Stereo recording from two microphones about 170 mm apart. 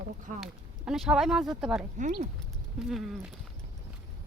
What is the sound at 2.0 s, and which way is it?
Speech, 45° right (ahead or behind).